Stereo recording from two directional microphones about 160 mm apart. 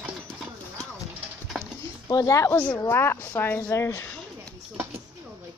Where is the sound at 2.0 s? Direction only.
20° left (ahead or behind).